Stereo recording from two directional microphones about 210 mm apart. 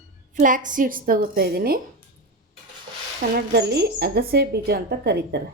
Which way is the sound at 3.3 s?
50° right (ahead or behind).